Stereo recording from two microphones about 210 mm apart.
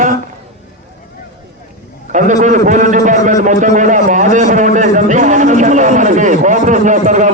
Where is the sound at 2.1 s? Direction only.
35° right (ahead or behind).